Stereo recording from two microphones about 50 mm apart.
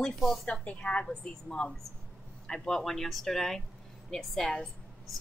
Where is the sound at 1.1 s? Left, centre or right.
Centre.